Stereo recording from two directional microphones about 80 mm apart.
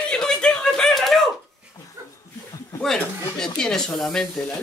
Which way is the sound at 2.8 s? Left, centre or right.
Centre.